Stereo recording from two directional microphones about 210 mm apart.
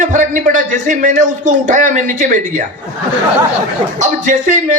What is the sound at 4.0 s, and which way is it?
Speech, 35° right (ahead or behind).